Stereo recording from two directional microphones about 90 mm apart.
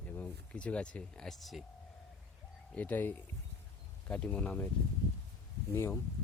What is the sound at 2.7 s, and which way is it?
Speech, 20° left (ahead or behind).